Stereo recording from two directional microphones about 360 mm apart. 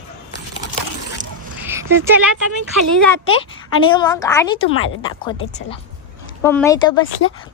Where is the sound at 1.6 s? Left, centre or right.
Centre.